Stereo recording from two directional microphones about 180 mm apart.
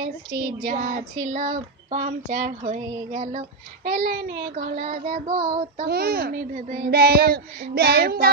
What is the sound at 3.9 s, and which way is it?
Child singing, 60° right (ahead or behind).